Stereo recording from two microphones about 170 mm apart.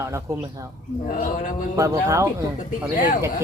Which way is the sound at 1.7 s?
20° right (ahead or behind).